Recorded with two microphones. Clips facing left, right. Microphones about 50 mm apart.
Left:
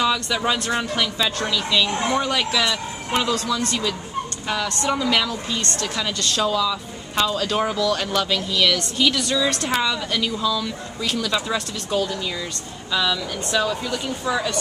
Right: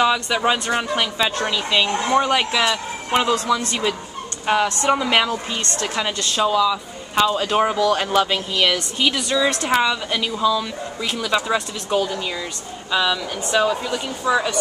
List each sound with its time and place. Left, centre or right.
0.0 s a woman's voice: centre